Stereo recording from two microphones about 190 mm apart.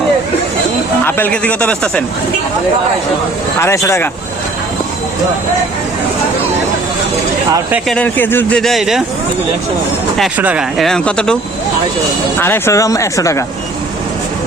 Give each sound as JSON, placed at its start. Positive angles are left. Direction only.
{"t": 1.0, "sound": "a man's voice", "side_deg": 10}
{"t": 3.6, "sound": "a man's voice", "side_deg": 15}
{"t": 7.9, "sound": "speech", "side_deg": 5}
{"t": 10.2, "sound": "speech", "side_deg": -5}
{"t": 12.4, "sound": "a man's voice", "side_deg": 10}